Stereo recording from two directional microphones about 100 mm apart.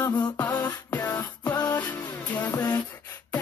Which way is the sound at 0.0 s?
20° left (ahead or behind).